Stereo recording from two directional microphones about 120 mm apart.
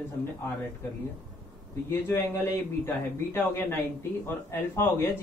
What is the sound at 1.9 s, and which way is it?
Speech, 20° left (ahead or behind).